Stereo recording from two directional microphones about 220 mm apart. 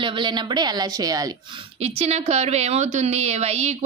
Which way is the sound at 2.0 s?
30° right (ahead or behind).